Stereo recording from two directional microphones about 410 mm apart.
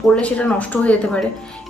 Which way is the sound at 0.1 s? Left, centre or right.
Centre.